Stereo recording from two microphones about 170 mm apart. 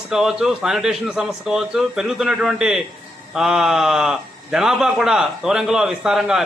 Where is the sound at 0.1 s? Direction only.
Centre (ahead or behind).